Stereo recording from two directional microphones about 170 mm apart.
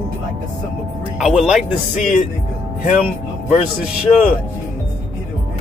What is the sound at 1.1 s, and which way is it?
Speech, centre (ahead or behind).